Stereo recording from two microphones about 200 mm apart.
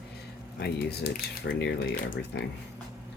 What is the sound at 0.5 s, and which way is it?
Speech, 55° left (ahead or behind).